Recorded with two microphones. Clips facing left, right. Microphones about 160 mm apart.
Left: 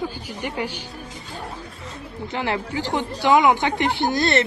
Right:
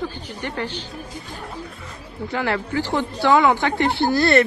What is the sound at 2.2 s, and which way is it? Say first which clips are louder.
A woman's voice: right 2 dB; 20° left (ahead or behind).